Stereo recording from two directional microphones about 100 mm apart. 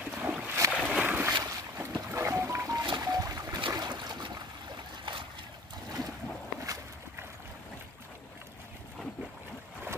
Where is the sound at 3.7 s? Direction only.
45° right (ahead or behind).